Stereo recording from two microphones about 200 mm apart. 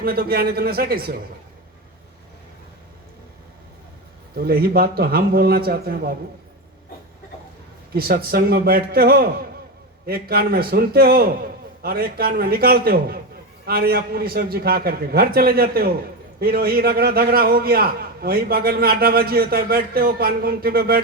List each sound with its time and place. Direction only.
0.0 s a man's voice: 50° right (ahead or behind)
4.4 s a man's voice: 50° right (ahead or behind)
7.9 s a man's voice: 50° right (ahead or behind)